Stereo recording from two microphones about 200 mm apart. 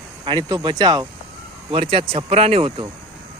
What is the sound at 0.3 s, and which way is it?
Speech, 20° right (ahead or behind).